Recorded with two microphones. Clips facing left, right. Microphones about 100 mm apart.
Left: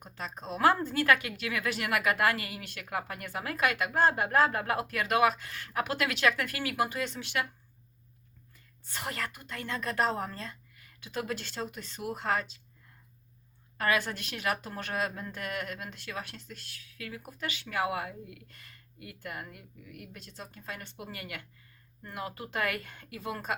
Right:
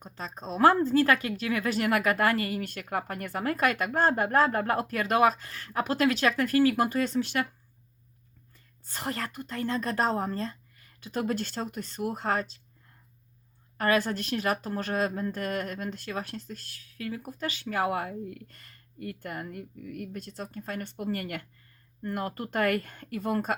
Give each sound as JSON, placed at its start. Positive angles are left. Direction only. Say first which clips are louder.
{"t": 0.0, "sound": "speech", "louder": "right 2 dB", "side_deg": -30}
{"t": 8.5, "sound": "speech", "louder": "right 1 dB", "side_deg": -35}
{"t": 13.7, "sound": "speech", "louder": "right 4 dB", "side_deg": -35}